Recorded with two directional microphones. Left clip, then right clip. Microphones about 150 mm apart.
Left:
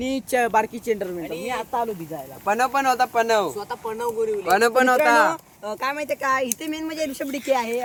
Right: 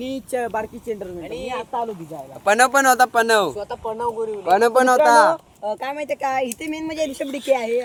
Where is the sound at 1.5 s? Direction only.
5° left (ahead or behind).